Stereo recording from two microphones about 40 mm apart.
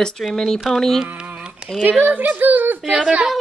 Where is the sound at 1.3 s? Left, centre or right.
Right.